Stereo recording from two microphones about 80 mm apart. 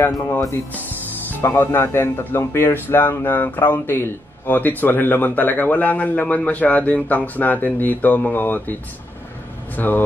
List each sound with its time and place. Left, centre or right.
1.3 s speech: left
9.8 s speech: left